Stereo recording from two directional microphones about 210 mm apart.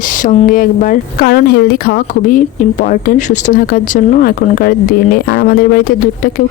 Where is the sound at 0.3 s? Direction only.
40° left (ahead or behind).